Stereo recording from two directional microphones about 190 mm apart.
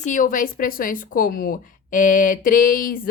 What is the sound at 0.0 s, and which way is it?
Speech, 45° left (ahead or behind).